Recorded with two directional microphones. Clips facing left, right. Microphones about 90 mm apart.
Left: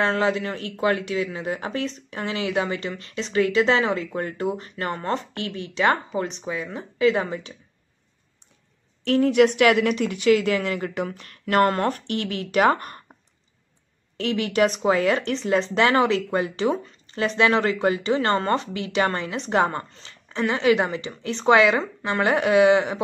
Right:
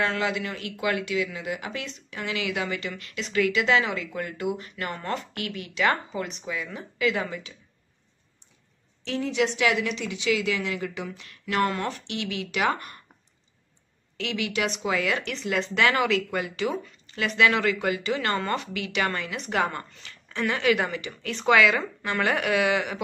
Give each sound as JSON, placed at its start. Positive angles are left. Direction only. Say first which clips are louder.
{"t": 0.0, "sound": "speech", "louder": "left 5 dB", "side_deg": 35}
{"t": 9.0, "sound": "a woman's voice", "louder": "left 9 dB", "side_deg": 55}
{"t": 14.1, "sound": "speech", "louder": "left 6 dB", "side_deg": 40}